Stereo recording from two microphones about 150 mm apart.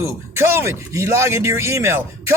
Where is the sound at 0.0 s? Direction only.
15° right (ahead or behind).